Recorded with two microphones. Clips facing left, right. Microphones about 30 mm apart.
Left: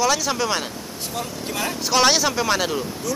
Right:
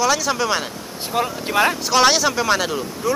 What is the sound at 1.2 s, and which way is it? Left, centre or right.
Speech, right.